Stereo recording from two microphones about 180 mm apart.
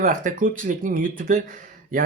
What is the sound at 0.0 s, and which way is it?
Speech, 50° right (ahead or behind).